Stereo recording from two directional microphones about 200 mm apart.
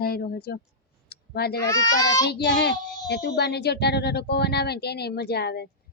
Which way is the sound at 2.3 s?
55° left (ahead or behind).